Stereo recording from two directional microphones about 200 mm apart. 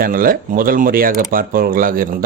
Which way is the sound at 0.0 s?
45° right (ahead or behind).